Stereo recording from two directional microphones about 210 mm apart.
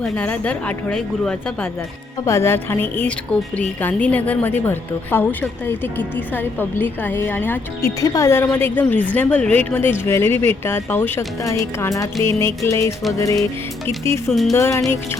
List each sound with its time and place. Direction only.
0.0 s a woman's voice: 5° left (ahead or behind)
14.3 s speech: centre (ahead or behind)
14.5 s a woman's voice: 15° left (ahead or behind)